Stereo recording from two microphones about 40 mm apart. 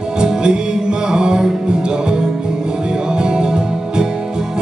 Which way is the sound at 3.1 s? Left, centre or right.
Right.